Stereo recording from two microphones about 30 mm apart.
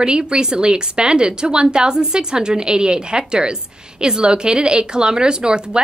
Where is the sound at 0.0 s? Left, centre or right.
Right.